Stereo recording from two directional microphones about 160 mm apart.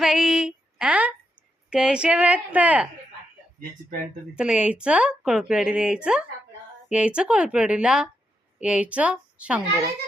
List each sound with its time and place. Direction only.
0.0 s a sound: centre (ahead or behind)
1.7 s a woman's voice: 5° right (ahead or behind)
3.8 s speech: 60° right (ahead or behind)
4.4 s a woman's voice: 5° right (ahead or behind)